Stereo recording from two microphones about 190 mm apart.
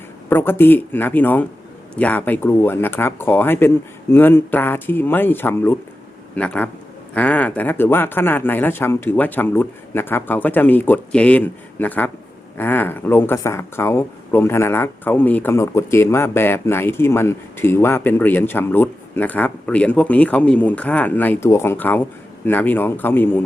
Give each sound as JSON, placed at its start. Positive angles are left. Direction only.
{"t": 0.3, "sound": "speech", "side_deg": 10}